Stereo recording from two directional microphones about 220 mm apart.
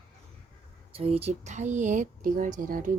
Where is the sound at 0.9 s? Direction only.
25° right (ahead or behind).